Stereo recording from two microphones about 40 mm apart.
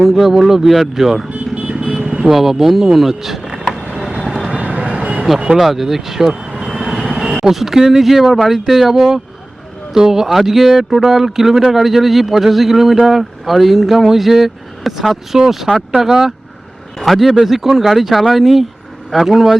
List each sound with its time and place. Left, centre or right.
0.0 s speech: centre
1.3 s vehicle: right
2.2 s speech: centre
3.9 s vehicle: centre
4.6 s vehicle: right
5.5 s vehicle: centre
7.2 s speech: centre
17.0 s speech: centre